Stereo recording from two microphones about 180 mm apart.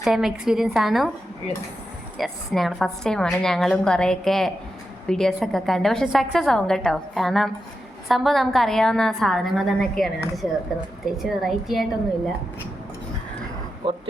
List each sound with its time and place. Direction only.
0.0 s a woman's voice: centre (ahead or behind)
2.1 s a woman's voice: centre (ahead or behind)
13.8 s speech: 25° right (ahead or behind)